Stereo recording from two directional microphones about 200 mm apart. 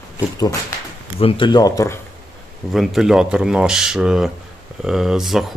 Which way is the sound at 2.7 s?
Centre (ahead or behind).